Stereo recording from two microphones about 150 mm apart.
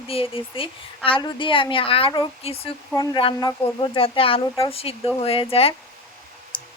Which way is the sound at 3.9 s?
40° left (ahead or behind).